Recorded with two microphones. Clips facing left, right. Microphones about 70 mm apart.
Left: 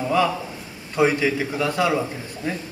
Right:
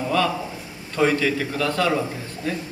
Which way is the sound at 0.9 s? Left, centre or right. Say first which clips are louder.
Left 1 dB; centre.